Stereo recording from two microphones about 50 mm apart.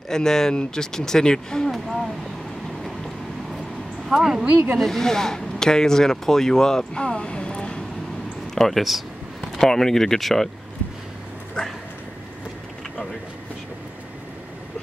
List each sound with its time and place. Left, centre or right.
0.1 s speech: centre
1.7 s speech: centre
4.2 s speech: centre
4.5 s speech: right
4.7 s speech: centre
8.5 s speech: centre